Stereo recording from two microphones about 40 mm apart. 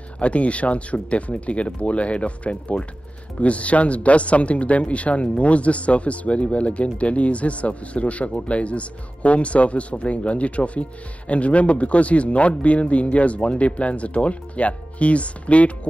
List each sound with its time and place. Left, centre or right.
0.2 s speech: left